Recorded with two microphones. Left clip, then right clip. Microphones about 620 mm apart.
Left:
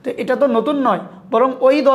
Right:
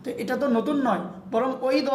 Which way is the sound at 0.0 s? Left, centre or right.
Left.